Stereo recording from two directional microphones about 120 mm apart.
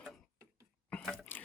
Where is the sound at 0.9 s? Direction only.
10° left (ahead or behind).